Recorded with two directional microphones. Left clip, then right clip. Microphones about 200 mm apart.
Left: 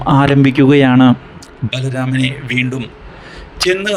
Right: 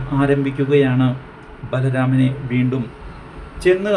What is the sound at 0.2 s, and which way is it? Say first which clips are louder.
Speech: left 4 dB; 50° left (ahead or behind).